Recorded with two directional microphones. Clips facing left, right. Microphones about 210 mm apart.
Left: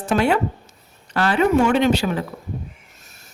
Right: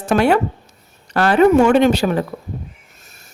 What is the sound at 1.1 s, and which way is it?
Speech, 45° right (ahead or behind).